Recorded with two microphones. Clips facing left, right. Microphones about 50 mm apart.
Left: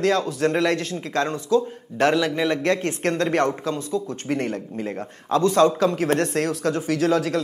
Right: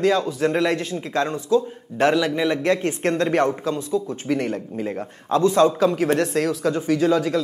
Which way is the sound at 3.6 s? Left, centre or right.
Left.